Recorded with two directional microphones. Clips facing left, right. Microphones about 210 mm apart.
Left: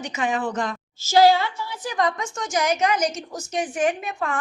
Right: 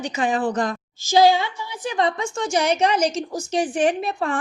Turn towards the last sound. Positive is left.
turn(degrees=-35)  # may be behind; listen again after turning